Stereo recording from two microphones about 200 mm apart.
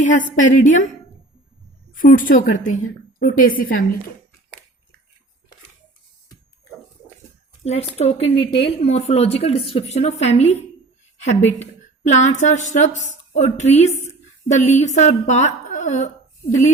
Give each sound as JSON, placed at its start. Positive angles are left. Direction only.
{"t": 0.0, "sound": "a woman's voice", "side_deg": 40}
{"t": 1.9, "sound": "a woman's voice", "side_deg": 40}
{"t": 7.6, "sound": "a woman's voice", "side_deg": 30}